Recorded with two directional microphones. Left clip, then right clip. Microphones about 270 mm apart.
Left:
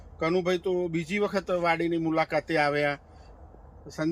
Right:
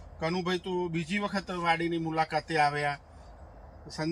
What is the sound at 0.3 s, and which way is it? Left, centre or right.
Speech, centre.